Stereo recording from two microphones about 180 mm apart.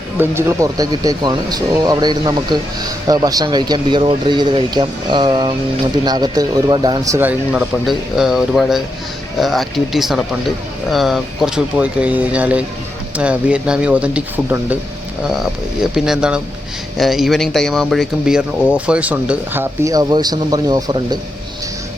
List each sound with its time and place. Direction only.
0.2 s speech: 15° right (ahead or behind)